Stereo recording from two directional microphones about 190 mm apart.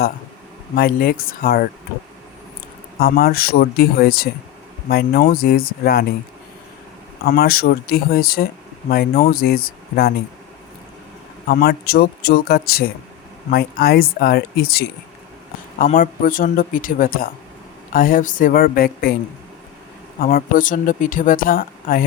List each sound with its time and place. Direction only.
0.8 s speech: 50° left (ahead or behind)
3.0 s speech: 55° left (ahead or behind)
7.3 s speech: 55° left (ahead or behind)
11.4 s speech: 55° left (ahead or behind)
20.1 s speech: 50° left (ahead or behind)